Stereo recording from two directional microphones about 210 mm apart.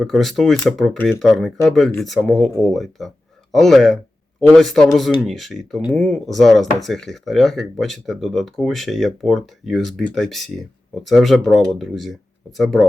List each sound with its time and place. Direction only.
0.0 s speech: centre (ahead or behind)